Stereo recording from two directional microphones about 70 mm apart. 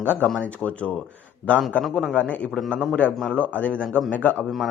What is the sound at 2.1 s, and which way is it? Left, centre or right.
Speech, centre.